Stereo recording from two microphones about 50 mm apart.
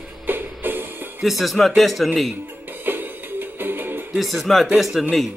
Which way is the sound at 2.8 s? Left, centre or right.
Right.